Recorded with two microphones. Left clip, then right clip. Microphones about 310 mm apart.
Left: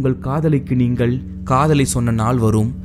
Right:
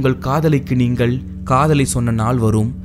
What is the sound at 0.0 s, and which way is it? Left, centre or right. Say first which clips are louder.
Speech: right 3 dB; right.